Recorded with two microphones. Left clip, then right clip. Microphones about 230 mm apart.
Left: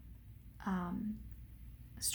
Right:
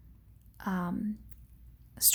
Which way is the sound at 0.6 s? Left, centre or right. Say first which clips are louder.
Right 6 dB; right.